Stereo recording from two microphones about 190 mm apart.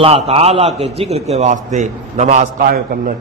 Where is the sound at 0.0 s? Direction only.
30° right (ahead or behind).